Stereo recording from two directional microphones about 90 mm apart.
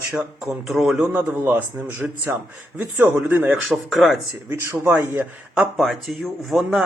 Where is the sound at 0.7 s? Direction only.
5° right (ahead or behind).